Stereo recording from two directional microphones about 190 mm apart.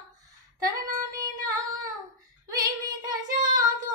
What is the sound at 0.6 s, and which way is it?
Female singing, 20° right (ahead or behind).